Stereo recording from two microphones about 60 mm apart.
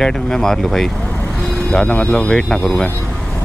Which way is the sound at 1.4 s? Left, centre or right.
Centre.